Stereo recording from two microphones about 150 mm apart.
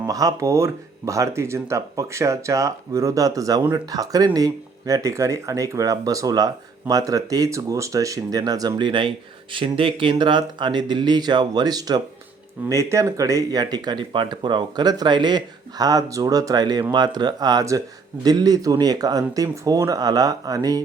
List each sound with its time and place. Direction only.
0.0 s speech: 25° right (ahead or behind)